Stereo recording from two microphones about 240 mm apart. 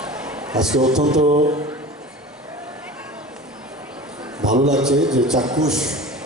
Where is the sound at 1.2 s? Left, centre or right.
Right.